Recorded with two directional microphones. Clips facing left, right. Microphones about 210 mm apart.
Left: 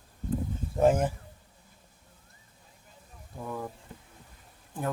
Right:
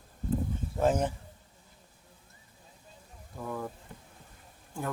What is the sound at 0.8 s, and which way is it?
Speech, 10° left (ahead or behind).